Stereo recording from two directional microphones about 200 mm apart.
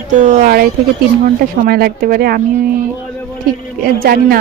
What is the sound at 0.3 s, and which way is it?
Speech, 45° right (ahead or behind).